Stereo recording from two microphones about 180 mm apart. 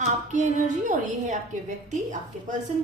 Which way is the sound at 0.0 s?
40° right (ahead or behind).